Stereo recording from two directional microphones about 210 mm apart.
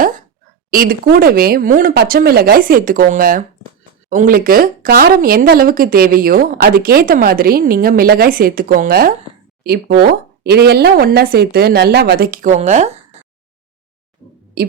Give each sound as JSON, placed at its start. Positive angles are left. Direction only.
{"t": 0.7, "sound": "speech", "side_deg": -45}